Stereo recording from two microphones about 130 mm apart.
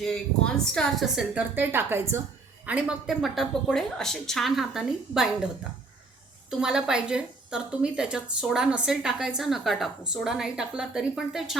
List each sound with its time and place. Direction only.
0.0 s a woman's voice: 5° left (ahead or behind)
1.5 s a woman's voice: 15° right (ahead or behind)
6.5 s a woman's voice: 5° right (ahead or behind)